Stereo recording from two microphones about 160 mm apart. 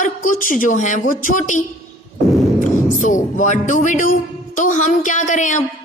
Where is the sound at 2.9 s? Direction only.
55° left (ahead or behind).